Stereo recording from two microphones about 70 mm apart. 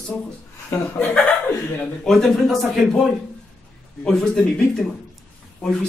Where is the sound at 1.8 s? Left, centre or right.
Centre.